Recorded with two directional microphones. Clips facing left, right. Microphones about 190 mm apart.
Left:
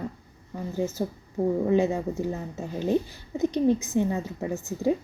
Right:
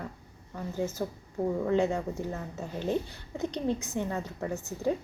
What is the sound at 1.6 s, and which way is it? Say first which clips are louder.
Speech: left 2 dB; 15° left (ahead or behind).